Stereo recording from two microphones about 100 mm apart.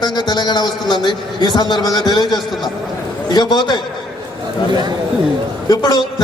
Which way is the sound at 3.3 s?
45° left (ahead or behind).